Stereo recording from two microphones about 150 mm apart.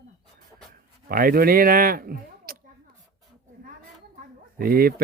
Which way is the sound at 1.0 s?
75° right (ahead or behind).